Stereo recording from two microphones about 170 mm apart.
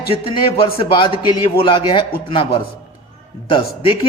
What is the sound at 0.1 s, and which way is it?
A man's voice, 30° left (ahead or behind).